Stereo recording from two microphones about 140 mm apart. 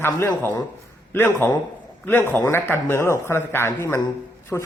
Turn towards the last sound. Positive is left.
turn(degrees=10)  # may be behind; listen again after turning